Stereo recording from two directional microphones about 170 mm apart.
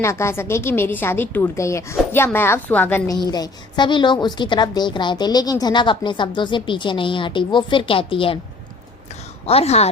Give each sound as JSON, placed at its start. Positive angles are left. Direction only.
{"t": 0.0, "sound": "a woman's voice", "side_deg": 15}
{"t": 3.2, "sound": "a woman's voice", "side_deg": 25}
{"t": 9.5, "sound": "speech", "side_deg": 40}